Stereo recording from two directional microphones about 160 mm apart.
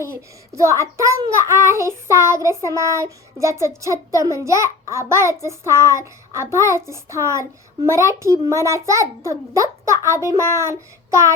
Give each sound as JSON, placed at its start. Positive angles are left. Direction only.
{"t": 0.0, "sound": "a child's voice", "side_deg": -15}